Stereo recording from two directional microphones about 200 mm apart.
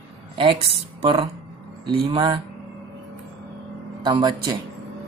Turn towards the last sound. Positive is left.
turn(degrees=-20)  # may be behind; listen again after turning